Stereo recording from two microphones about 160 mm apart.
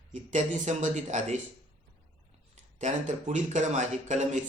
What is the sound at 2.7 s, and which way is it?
Speech, 50° right (ahead or behind).